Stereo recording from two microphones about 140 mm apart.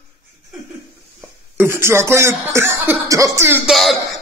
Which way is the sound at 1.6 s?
20° right (ahead or behind).